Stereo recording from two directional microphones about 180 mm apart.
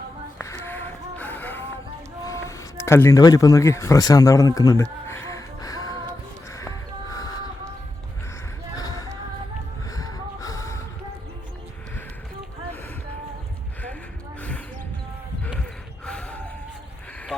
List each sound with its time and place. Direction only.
0.3 s music: 15° left (ahead or behind)
2.2 s a sound: 15° left (ahead or behind)
6.5 s music: 20° left (ahead or behind)
8.7 s a sound: 20° left (ahead or behind)
9.9 s gasp: 20° left (ahead or behind)
16.0 s gasp: 5° left (ahead or behind)